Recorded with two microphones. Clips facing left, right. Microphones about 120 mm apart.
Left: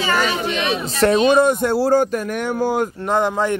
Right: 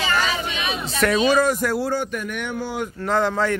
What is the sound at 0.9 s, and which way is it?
Speech, 25° left (ahead or behind).